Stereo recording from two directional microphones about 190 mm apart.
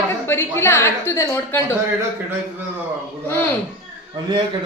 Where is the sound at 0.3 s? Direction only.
15° left (ahead or behind).